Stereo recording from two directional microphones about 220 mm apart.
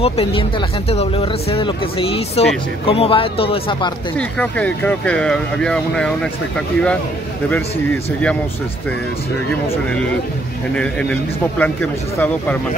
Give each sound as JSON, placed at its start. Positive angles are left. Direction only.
{"t": 0.0, "sound": "speech", "side_deg": 25}
{"t": 4.2, "sound": "speech", "side_deg": 5}
{"t": 10.8, "sound": "speech", "side_deg": 5}